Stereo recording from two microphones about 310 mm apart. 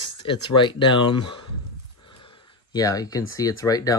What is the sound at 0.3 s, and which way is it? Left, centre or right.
Speech, centre.